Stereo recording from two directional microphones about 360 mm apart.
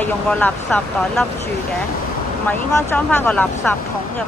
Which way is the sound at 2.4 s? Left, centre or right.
Centre.